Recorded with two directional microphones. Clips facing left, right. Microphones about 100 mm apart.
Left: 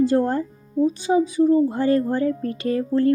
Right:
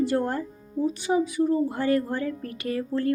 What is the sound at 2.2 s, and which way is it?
Speech, 35° left (ahead or behind).